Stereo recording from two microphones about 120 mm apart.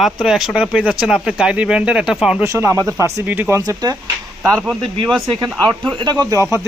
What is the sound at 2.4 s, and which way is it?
Speech, 20° right (ahead or behind).